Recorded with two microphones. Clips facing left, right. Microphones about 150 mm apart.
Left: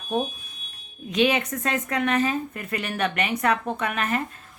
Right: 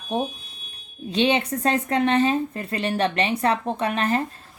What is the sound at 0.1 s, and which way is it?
A woman's voice, 30° right (ahead or behind).